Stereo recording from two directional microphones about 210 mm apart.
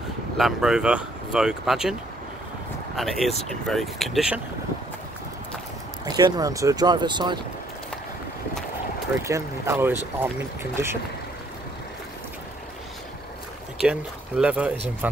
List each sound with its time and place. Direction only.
0.4 s speech: centre (ahead or behind)
3.0 s speech: centre (ahead or behind)
6.0 s speech: 20° right (ahead or behind)
9.2 s speech: 15° right (ahead or behind)
13.7 s speech: 5° right (ahead or behind)